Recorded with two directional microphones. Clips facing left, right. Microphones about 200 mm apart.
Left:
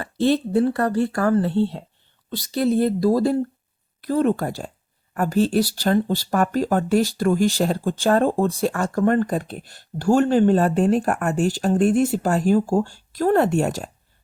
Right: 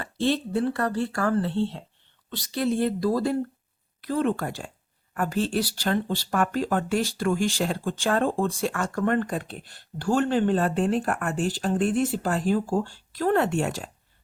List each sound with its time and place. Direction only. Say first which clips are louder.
0.0 s speech: left 5 dB; 40° left (ahead or behind)